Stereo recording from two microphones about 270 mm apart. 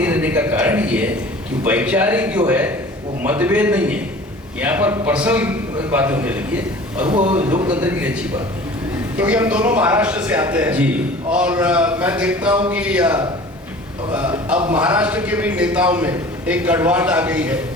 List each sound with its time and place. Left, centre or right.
0.0 s a man's voice: centre
7.1 s speech: right
7.4 s a man's voice: centre